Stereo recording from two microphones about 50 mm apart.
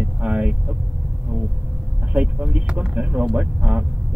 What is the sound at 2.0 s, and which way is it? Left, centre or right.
Speech, right.